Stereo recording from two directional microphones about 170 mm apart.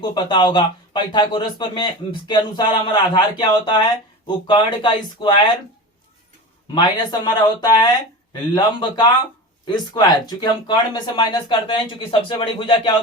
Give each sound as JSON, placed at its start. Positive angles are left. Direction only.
{"t": 0.0, "sound": "speech", "side_deg": 25}
{"t": 6.7, "sound": "speech", "side_deg": 25}